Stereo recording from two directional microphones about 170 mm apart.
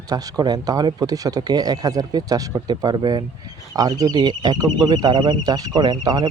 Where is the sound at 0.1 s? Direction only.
20° right (ahead or behind).